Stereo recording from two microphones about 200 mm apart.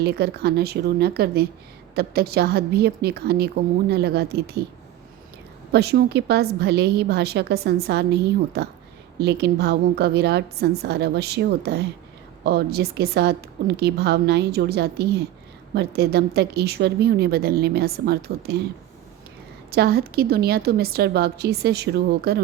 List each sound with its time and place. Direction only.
0.0 s a woman's voice: 50° right (ahead or behind)
5.7 s a woman's voice: 55° right (ahead or behind)
19.7 s a woman's voice: 50° right (ahead or behind)